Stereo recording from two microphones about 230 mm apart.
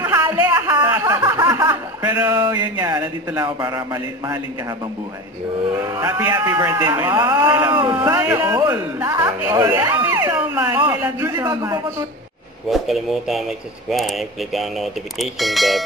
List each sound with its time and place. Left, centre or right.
0.0 s a sound: centre
1.4 s chuckle: centre
2.0 s a man's voice: centre
5.7 s a man's voice: centre
12.6 s speech: centre